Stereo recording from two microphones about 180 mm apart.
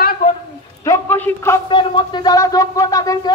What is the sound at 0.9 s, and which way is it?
Speech, 10° left (ahead or behind).